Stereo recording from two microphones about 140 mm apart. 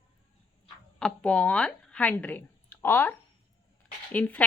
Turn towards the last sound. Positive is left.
turn(degrees=10)  # may be behind; listen again after turning